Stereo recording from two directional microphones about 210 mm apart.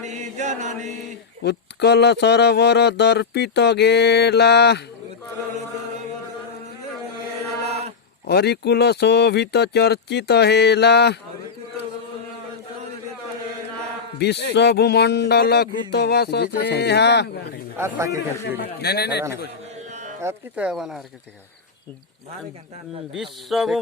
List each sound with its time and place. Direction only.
0.0 s chant: 35° right (ahead or behind)
1.4 s speech: 50° left (ahead or behind)
7.6 s a sound: 30° right (ahead or behind)
8.3 s speech: 50° left (ahead or behind)
14.2 s speech: 50° left (ahead or behind)
17.7 s a man's voice: 10° right (ahead or behind)
18.5 s speech: 50° left (ahead or behind)
19.9 s a sound: 35° right (ahead or behind)
20.2 s speech: 5° right (ahead or behind)
23.1 s speech: centre (ahead or behind)